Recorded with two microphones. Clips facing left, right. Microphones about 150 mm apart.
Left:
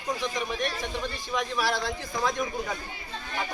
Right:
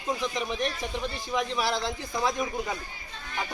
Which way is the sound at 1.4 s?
25° right (ahead or behind).